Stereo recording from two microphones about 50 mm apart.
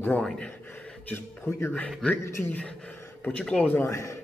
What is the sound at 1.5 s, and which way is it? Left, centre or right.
Speech, left.